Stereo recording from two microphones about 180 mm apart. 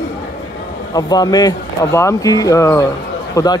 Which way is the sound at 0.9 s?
20° left (ahead or behind).